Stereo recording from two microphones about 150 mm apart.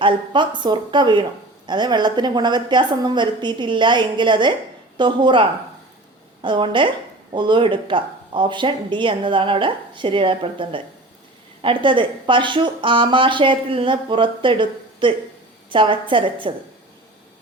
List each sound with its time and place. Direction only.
0.0 s a woman's voice: 30° right (ahead or behind)